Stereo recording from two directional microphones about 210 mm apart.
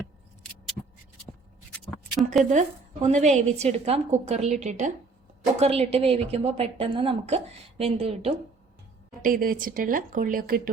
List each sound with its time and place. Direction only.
1.7 s a sound: centre (ahead or behind)
2.4 s a woman's voice: 35° right (ahead or behind)
9.2 s a woman's voice: 45° right (ahead or behind)